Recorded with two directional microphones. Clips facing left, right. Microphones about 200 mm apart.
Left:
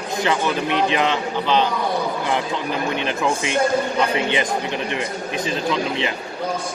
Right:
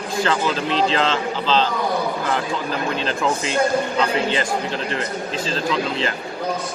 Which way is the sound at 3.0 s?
15° left (ahead or behind).